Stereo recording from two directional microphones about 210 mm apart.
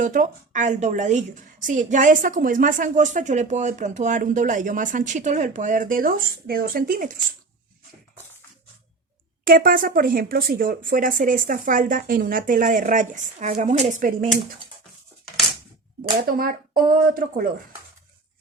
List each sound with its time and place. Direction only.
0.0 s a woman's voice: 35° right (ahead or behind)
9.4 s a woman's voice: 45° right (ahead or behind)
16.3 s speech: 45° right (ahead or behind)